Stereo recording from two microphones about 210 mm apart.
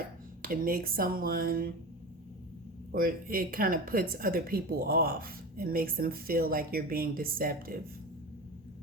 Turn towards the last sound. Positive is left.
turn(degrees=-45)  # may be behind; listen again after turning